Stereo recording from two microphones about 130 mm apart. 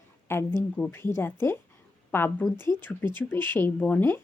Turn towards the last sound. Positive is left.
turn(degrees=15)  # may be behind; listen again after turning